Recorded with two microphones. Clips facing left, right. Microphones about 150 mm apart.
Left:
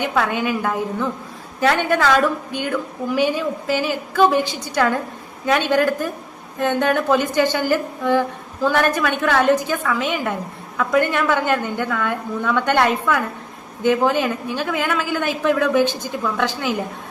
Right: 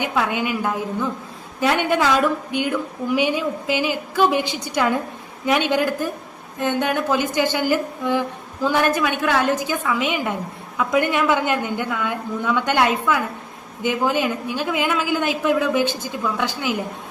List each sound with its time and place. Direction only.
0.0 s a woman's voice: 10° right (ahead or behind)